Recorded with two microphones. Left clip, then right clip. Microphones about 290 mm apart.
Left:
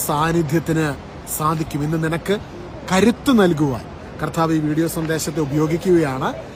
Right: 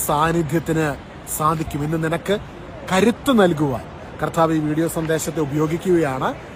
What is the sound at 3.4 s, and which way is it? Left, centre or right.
Speech, centre.